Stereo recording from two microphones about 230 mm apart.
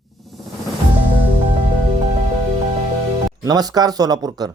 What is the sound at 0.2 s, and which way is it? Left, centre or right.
Music, centre.